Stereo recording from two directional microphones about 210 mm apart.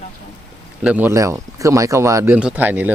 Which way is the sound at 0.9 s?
10° right (ahead or behind).